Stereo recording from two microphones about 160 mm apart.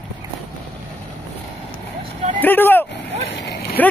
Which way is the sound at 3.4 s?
90° left.